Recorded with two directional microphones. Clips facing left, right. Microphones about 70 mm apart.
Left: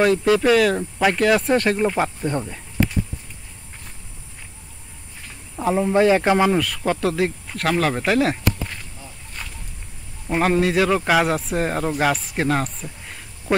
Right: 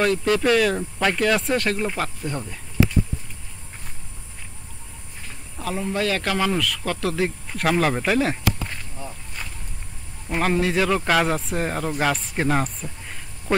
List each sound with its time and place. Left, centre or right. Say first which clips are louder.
0.0 s speech: left 3 dB; centre
5.6 s speech: left 8 dB; left
7.0 s speech: left 3 dB; centre
9.4 s a sound: left 1 dB; centre
10.4 s speech: left 3 dB; centre